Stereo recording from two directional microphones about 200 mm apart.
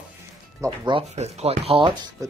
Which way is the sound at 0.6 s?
20° right (ahead or behind).